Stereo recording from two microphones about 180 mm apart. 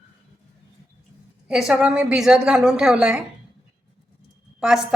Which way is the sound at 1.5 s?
5° right (ahead or behind).